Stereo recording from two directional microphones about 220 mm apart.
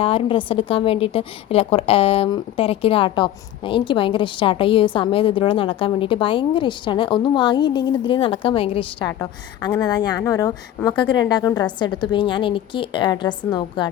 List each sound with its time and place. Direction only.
0.0 s a woman's voice: 25° left (ahead or behind)